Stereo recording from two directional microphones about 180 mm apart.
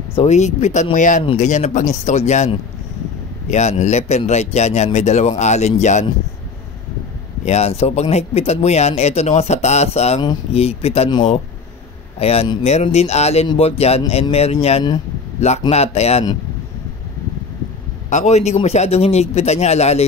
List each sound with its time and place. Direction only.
0.1 s speech: 40° left (ahead or behind)
7.4 s speech: 35° left (ahead or behind)
18.1 s speech: 40° left (ahead or behind)